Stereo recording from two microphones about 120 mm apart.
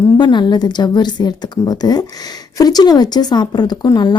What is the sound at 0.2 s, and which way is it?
A woman's voice, 40° left (ahead or behind).